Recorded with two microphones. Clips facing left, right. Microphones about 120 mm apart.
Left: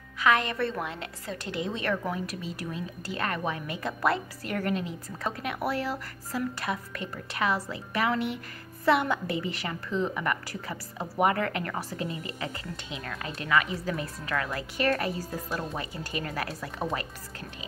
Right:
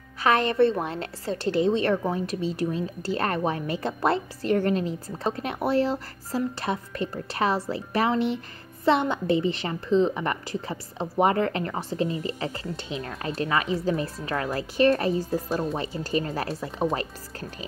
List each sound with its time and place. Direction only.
0.2 s a woman's voice: 35° right (ahead or behind)